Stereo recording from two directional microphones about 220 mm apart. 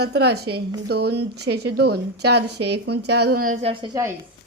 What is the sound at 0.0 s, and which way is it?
A woman's voice, 50° right (ahead or behind).